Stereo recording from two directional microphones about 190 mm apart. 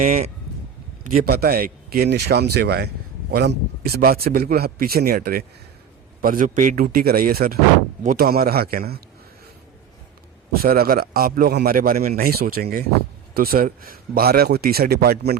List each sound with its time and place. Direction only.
0.0 s a man's voice: 45° right (ahead or behind)
10.5 s a man's voice: 50° right (ahead or behind)